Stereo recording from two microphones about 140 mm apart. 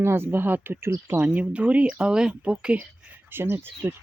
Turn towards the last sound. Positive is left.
turn(degrees=-15)  # may be behind; listen again after turning